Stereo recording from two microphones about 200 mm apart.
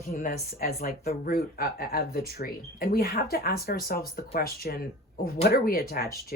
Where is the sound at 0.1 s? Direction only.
45° left (ahead or behind).